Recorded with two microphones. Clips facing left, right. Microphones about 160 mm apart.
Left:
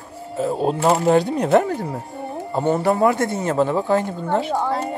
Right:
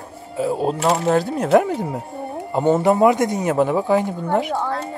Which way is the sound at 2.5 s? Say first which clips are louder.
Right 3 dB; 20° right (ahead or behind).